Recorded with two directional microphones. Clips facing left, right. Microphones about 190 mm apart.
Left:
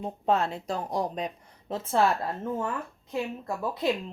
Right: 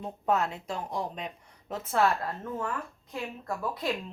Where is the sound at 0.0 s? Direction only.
30° left (ahead or behind).